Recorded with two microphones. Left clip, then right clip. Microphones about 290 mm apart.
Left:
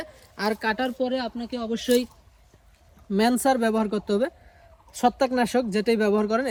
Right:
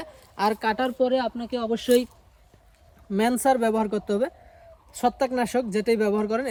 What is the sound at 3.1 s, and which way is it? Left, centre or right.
Speech, centre.